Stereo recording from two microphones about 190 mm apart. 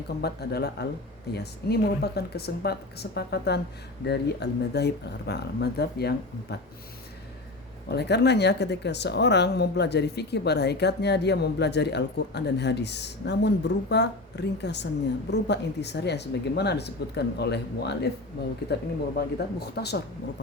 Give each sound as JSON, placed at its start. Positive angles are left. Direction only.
{"t": 0.2, "sound": "speech", "side_deg": 55}
{"t": 7.9, "sound": "speech", "side_deg": 60}